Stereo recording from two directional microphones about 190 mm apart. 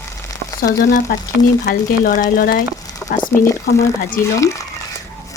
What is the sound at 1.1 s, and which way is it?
A woman's voice, 50° left (ahead or behind).